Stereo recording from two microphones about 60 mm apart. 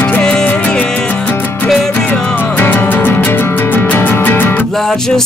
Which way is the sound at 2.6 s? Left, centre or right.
Left.